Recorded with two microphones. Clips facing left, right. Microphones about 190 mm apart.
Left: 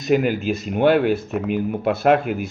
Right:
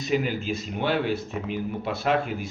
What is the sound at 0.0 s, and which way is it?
Speech, 55° left (ahead or behind).